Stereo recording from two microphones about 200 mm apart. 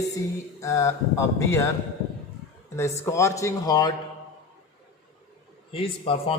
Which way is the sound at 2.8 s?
15° left (ahead or behind).